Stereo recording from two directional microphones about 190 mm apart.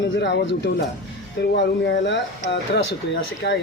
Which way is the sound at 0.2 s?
65° left (ahead or behind).